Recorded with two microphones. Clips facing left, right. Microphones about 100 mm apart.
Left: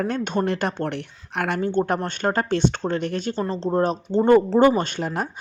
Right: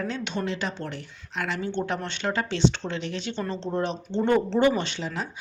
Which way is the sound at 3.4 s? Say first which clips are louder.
Left 6 dB; 35° left (ahead or behind).